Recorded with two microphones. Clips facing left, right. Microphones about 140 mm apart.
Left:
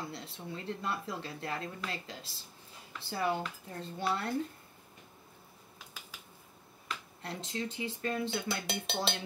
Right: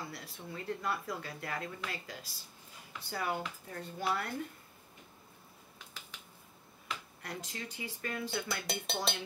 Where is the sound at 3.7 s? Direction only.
25° left (ahead or behind).